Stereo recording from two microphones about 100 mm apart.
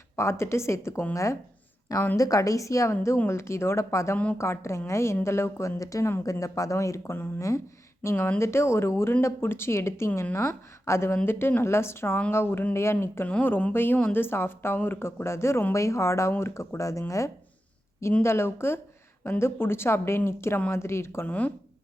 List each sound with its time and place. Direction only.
0.2 s a woman's voice: 25° left (ahead or behind)
8.0 s speech: 20° left (ahead or behind)
21.2 s speech: 15° left (ahead or behind)